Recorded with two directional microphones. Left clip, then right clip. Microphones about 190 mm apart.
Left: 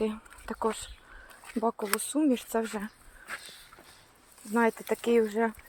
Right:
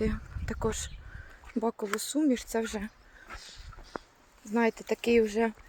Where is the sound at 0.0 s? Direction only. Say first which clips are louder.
Left 1 dB; 10° right (ahead or behind).